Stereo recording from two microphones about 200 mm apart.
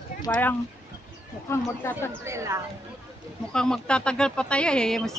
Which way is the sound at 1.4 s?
15° left (ahead or behind).